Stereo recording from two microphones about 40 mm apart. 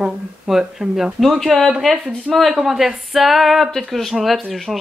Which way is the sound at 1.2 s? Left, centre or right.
Centre.